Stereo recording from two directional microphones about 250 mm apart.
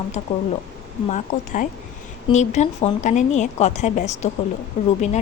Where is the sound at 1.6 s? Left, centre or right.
Left.